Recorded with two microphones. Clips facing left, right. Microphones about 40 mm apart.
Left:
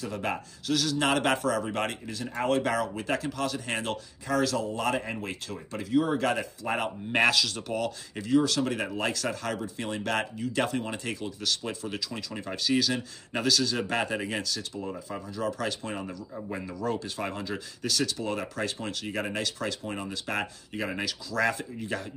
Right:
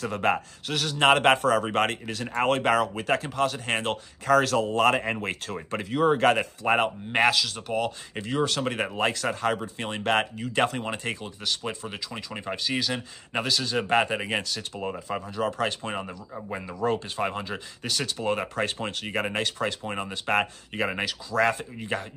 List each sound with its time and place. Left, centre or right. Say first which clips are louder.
0.0 s speech: right 6 dB; right
5.1 s speech: right 4 dB; right
7.1 s speech: left 1 dB; centre
8.2 s speech: left 2 dB; right
14.8 s speech: right 4 dB; right
16.1 s speech: right 1 dB; right